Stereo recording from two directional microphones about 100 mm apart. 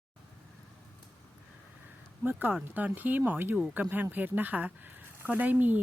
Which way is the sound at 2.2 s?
20° right (ahead or behind).